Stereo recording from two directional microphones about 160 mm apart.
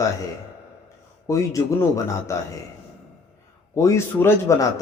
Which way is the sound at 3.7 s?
20° left (ahead or behind).